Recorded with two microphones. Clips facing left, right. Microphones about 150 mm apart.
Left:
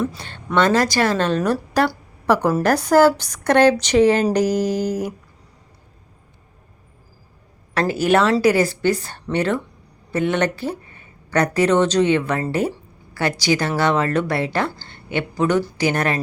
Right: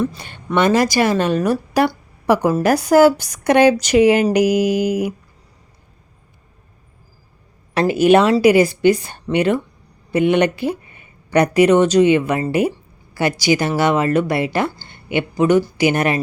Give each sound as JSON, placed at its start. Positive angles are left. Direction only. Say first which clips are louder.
{"t": 0.2, "sound": "a woman's voice", "louder": "right 1 dB", "side_deg": -15}
{"t": 7.7, "sound": "a woman's voice", "louder": "right 5 dB", "side_deg": -15}